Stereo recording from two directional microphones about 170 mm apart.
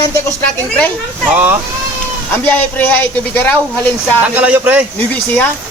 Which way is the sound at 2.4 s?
10° left (ahead or behind).